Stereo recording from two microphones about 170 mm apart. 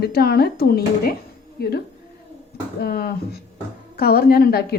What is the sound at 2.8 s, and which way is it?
A woman's voice, 65° left (ahead or behind).